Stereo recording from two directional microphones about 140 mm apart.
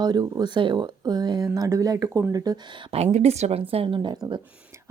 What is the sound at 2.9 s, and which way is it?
Speech, 50° right (ahead or behind).